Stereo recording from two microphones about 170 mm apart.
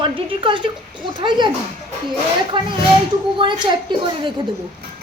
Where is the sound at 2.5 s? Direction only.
30° right (ahead or behind).